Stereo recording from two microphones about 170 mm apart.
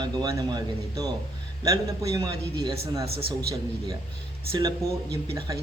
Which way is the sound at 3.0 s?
35° right (ahead or behind).